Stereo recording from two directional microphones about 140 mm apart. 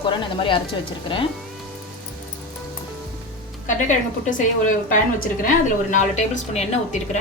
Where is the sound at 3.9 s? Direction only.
60° left (ahead or behind); by 5.5 s 85° left.